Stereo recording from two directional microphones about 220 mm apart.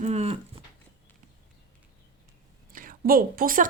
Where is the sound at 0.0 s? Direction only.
30° right (ahead or behind).